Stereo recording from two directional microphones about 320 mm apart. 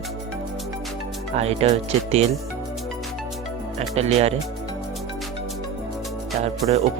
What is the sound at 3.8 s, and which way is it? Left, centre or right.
Speech, centre.